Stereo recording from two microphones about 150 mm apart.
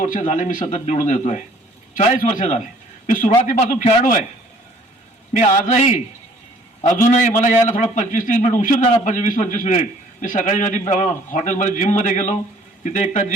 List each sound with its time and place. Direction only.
0.0 s speech: 55° left (ahead or behind)
5.3 s speech: 50° left (ahead or behind)
7.1 s a man's voice: 55° left (ahead or behind)